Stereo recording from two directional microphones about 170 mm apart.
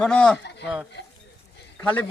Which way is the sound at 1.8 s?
10° left (ahead or behind).